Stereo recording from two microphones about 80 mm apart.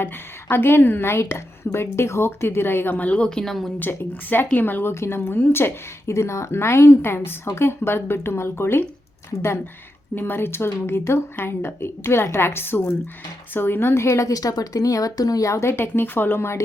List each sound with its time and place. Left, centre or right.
0.0 s a woman's voice: left; by 3.7 s centre
3.8 s a woman's voice: left
10.2 s a woman's voice: left
15.7 s a woman's voice: left